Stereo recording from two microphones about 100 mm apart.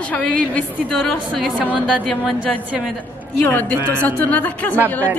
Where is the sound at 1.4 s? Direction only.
10° right (ahead or behind).